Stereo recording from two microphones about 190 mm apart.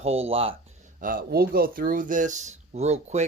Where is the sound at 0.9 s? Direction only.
45° right (ahead or behind).